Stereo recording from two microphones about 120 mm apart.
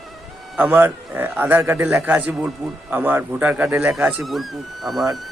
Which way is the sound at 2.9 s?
15° right (ahead or behind).